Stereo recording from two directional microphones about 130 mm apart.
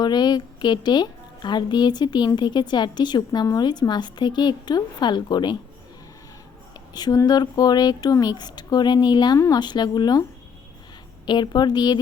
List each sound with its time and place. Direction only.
0.0 s a woman's voice: 35° left (ahead or behind)
6.7 s a woman's voice: 30° left (ahead or behind)
11.3 s a woman's voice: 35° left (ahead or behind)